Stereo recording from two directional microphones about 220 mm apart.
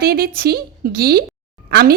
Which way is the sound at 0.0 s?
45° right (ahead or behind).